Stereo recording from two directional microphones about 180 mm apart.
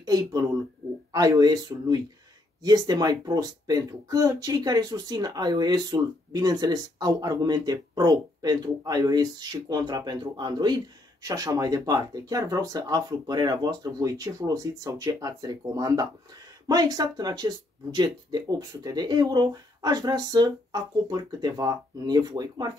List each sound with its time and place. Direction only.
0.0 s speech: 20° right (ahead or behind)